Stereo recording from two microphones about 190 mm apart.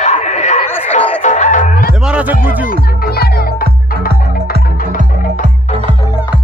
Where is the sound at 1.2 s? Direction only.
40° left (ahead or behind).